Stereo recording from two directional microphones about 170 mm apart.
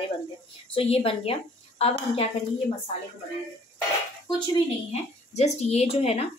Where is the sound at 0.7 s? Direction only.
35° left (ahead or behind).